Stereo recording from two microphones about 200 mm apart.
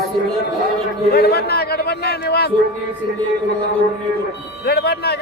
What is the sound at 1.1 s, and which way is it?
A man's voice, 50° left (ahead or behind).